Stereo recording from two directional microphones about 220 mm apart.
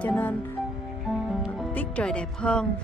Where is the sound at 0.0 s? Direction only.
5° left (ahead or behind).